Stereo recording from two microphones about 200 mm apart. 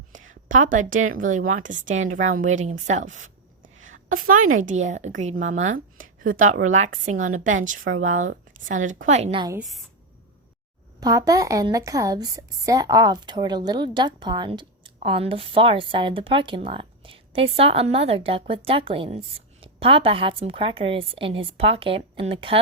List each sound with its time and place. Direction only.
0.5 s a woman's voice: 40° right (ahead or behind)
3.8 s a sound: 80° right
4.1 s a woman's voice: 40° right (ahead or behind)
5.5 s speech: 80° right
6.7 s a woman's voice: 35° right (ahead or behind)
11.0 s a woman's voice: 20° right (ahead or behind)